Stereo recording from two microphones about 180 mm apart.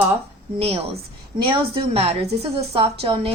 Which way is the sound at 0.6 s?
35° right (ahead or behind).